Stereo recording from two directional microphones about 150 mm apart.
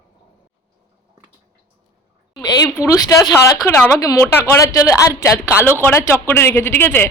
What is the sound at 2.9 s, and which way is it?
A woman's voice, 25° left (ahead or behind).